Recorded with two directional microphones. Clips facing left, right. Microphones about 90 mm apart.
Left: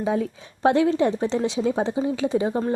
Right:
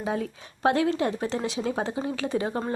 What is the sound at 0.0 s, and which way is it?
Speech, 25° left (ahead or behind).